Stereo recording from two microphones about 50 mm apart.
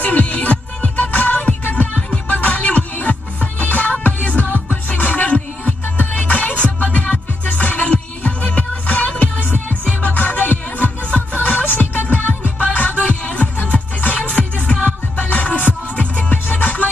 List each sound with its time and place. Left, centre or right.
0.0 s music: left